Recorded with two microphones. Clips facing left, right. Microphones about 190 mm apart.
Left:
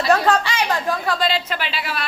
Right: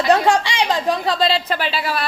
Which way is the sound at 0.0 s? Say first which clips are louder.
Right 2 dB; 20° right (ahead or behind).